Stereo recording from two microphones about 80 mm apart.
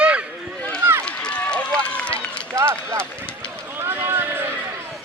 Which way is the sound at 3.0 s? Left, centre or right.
Centre.